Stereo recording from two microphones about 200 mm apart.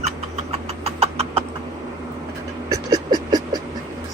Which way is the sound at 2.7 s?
20° right (ahead or behind).